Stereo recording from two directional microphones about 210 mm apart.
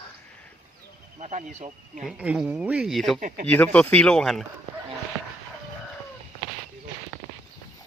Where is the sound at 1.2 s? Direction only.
35° right (ahead or behind).